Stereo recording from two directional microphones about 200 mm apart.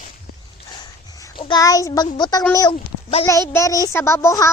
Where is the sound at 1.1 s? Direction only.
20° left (ahead or behind).